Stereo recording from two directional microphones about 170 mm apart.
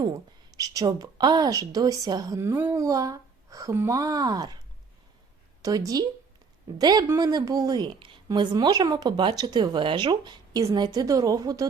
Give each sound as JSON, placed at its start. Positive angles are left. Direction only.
{"t": 0.5, "sound": "a woman's voice", "side_deg": -20}
{"t": 5.6, "sound": "a woman's voice", "side_deg": -20}